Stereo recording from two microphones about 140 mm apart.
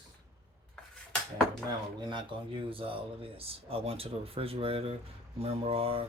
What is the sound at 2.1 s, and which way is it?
Speech, 35° right (ahead or behind).